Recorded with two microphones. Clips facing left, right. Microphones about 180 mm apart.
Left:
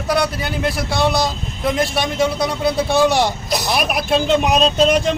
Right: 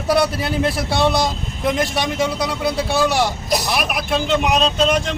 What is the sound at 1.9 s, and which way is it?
Speech, 15° right (ahead or behind).